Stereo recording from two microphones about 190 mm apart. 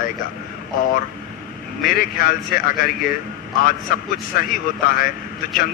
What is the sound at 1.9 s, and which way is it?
A man's voice, 50° left (ahead or behind).